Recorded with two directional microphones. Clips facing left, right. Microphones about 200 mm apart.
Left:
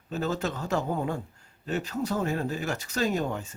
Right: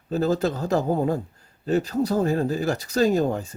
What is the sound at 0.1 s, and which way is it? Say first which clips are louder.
Speech: right 7 dB; 40° right (ahead or behind).